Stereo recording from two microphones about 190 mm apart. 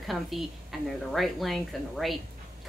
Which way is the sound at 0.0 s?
Centre (ahead or behind).